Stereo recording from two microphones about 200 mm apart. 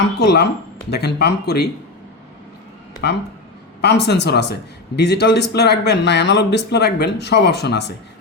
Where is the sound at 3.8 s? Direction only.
55° left (ahead or behind).